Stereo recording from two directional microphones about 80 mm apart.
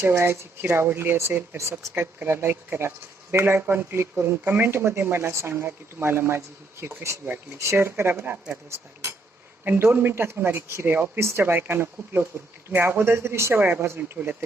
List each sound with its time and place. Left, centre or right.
0.0 s speech: right
9.6 s speech: right